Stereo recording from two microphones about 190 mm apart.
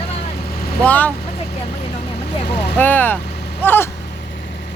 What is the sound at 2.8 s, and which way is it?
Speech, 10° left (ahead or behind).